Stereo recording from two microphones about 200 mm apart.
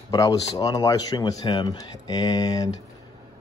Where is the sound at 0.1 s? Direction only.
20° left (ahead or behind).